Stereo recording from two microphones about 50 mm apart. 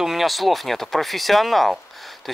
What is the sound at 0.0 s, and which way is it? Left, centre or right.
Speech, centre.